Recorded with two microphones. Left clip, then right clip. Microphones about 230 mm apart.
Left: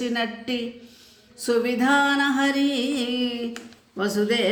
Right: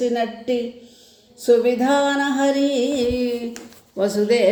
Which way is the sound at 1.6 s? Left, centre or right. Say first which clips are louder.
Right 3 dB; centre.